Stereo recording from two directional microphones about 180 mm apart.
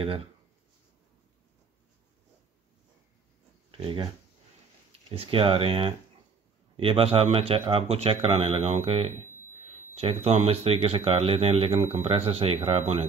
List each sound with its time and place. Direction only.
0.0 s speech: 30° right (ahead or behind)
3.7 s speech: 30° right (ahead or behind)
5.1 s speech: 30° right (ahead or behind)